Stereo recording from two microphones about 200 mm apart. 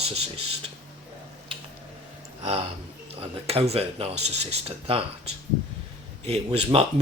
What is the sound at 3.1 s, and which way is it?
A man's voice, 30° right (ahead or behind).